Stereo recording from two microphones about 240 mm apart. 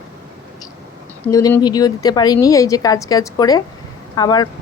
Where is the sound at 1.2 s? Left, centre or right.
Centre.